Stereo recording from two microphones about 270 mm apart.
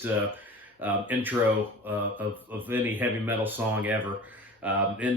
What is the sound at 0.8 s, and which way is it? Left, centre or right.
Speech, centre.